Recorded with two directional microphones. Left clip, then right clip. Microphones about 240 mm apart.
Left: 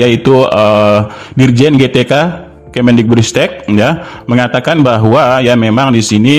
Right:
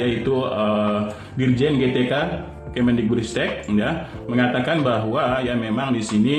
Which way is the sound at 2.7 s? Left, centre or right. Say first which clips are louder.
Left 12 dB; left.